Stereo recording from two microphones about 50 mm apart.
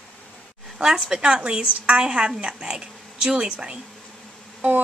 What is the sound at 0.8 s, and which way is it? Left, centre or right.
A woman's voice, centre.